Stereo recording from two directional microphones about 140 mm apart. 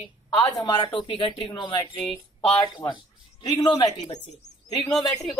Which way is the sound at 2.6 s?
30° left (ahead or behind).